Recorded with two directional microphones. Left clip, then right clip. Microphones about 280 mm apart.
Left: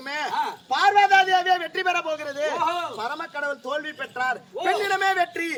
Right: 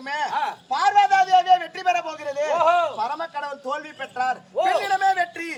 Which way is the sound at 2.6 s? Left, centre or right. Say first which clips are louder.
Right 9 dB; centre.